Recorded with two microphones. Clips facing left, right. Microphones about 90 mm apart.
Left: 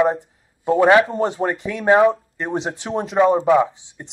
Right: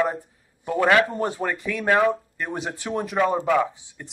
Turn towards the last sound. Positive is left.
turn(degrees=20)  # may be behind; listen again after turning